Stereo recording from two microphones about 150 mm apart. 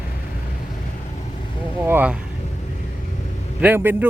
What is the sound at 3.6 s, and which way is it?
Speech, 15° right (ahead or behind).